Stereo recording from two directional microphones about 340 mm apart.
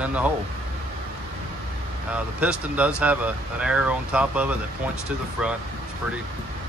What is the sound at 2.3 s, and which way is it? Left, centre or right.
Speech, centre.